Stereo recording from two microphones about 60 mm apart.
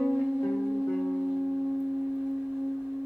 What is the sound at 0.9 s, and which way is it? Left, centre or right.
Music, centre.